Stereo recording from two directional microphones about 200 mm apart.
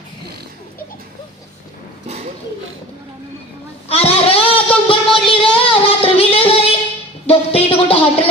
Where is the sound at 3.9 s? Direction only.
30° left (ahead or behind).